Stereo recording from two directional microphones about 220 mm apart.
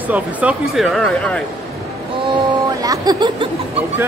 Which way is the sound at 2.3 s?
15° right (ahead or behind).